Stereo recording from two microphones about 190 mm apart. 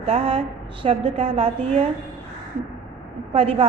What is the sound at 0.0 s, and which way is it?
A woman's voice, 30° right (ahead or behind).